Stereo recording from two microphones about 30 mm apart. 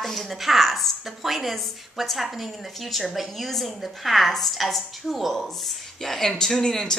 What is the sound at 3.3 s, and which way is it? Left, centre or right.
A woman's voice, centre.